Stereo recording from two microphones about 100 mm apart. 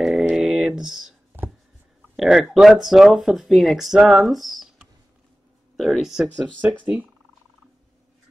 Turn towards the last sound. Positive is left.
turn(degrees=-15)  # may be behind; listen again after turning